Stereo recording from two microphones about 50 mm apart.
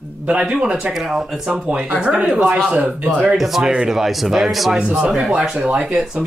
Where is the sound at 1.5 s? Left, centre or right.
Right.